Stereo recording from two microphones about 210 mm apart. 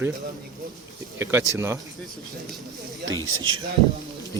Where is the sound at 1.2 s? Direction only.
15° right (ahead or behind).